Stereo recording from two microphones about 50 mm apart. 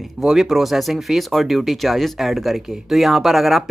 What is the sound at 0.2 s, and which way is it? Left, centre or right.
Speech, centre.